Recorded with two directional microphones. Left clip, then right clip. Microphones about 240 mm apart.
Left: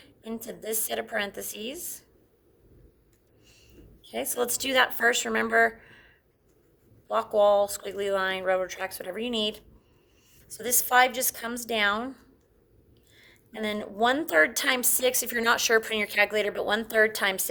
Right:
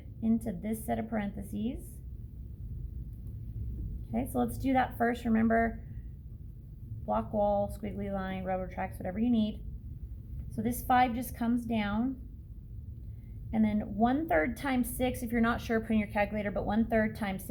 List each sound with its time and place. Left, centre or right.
0.3 s a woman's voice: left
4.1 s a woman's voice: left
7.1 s a woman's voice: left
10.6 s a woman's voice: left
13.6 s a woman's voice: left